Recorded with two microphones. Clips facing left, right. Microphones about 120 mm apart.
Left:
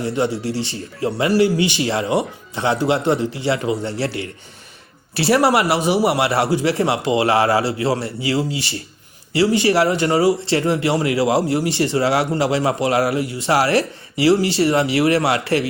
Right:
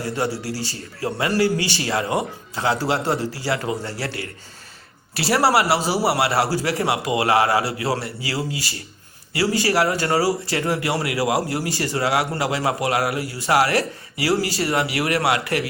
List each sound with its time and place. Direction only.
0.0 s a man's voice: 25° left (ahead or behind)